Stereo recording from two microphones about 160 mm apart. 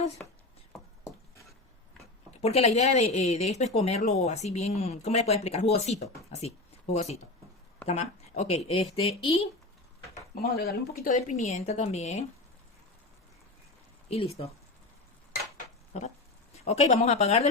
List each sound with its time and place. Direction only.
2.4 s speech: 40° left (ahead or behind)
10.4 s speech: 75° left (ahead or behind)
11.1 s speech: 50° left (ahead or behind)
14.1 s speech: 40° left (ahead or behind)
15.9 s speech: 45° left (ahead or behind)